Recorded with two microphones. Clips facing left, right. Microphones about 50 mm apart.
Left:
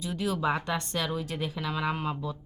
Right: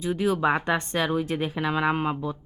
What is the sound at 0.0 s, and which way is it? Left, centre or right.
A woman's voice, right.